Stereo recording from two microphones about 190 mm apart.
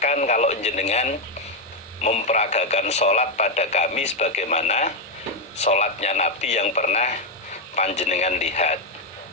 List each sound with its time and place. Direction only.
0.0 s speech: 40° left (ahead or behind)